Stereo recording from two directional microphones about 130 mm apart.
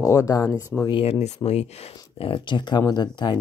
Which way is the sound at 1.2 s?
60° left (ahead or behind).